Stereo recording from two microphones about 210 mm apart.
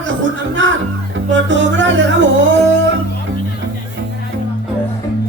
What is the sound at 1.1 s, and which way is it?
Music, 60° right (ahead or behind).